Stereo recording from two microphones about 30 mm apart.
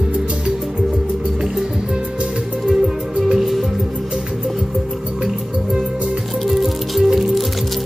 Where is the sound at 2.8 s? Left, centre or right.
Centre.